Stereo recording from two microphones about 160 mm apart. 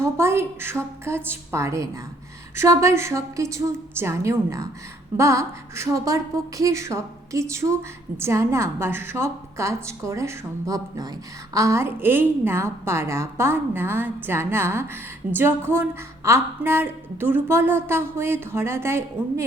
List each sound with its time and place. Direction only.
0.2 s a woman's voice: 15° right (ahead or behind)